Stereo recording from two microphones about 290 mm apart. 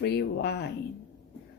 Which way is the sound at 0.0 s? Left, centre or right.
Left.